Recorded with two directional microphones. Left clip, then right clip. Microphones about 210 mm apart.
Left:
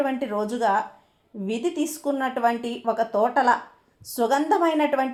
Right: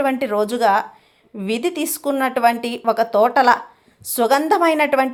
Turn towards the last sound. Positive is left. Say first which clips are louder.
# right 6 dB
turn(degrees=-30)  # may be behind; listen again after turning